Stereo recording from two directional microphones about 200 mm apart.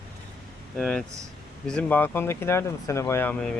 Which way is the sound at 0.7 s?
5° left (ahead or behind).